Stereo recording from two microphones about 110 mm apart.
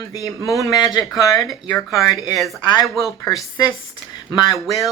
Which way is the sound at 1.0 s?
Centre (ahead or behind).